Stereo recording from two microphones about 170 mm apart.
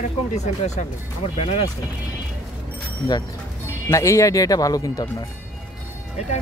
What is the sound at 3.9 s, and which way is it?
Speech, 15° left (ahead or behind).